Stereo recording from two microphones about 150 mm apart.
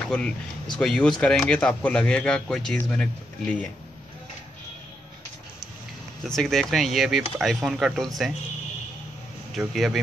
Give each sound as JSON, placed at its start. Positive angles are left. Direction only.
{"t": 0.1, "sound": "speech", "side_deg": 5}
{"t": 6.2, "sound": "speech", "side_deg": 0}
{"t": 9.6, "sound": "speech", "side_deg": -5}